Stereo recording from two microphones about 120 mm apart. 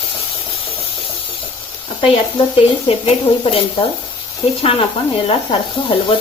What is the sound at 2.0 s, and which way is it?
Speech, 45° left (ahead or behind).